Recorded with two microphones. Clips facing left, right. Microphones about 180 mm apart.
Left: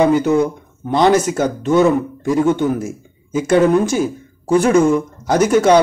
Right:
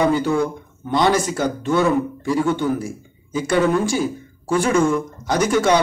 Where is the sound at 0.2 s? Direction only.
20° left (ahead or behind).